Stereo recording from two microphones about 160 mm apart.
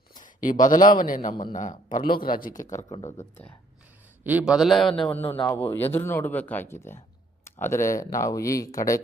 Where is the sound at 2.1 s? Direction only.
65° left (ahead or behind).